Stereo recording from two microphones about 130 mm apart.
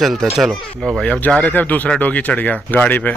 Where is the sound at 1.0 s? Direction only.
10° left (ahead or behind).